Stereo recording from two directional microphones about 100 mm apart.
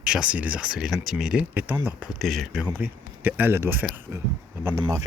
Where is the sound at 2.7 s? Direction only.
20° right (ahead or behind).